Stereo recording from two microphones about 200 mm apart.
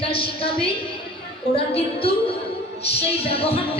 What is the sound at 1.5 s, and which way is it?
Speech, 30° left (ahead or behind).